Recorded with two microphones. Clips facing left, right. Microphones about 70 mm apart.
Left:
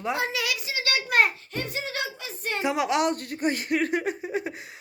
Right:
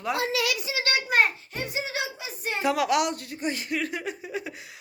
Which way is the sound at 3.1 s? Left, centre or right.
Left.